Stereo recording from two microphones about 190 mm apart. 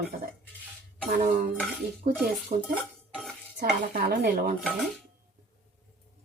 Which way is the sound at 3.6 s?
50° right (ahead or behind).